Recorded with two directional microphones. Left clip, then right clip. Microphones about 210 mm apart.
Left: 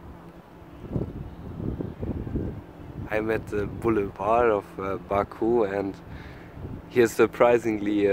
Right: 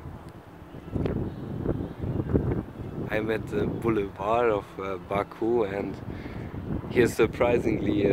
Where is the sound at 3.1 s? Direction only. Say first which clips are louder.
Left 2 dB; 10° left (ahead or behind).